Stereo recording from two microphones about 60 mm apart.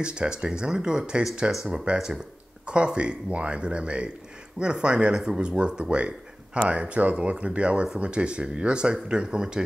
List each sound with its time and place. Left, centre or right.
0.0 s speech: centre